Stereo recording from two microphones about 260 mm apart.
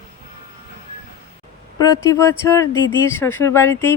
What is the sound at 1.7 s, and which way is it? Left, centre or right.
Speech, centre.